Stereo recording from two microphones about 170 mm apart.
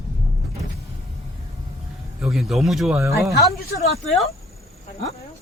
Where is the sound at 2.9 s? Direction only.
15° right (ahead or behind).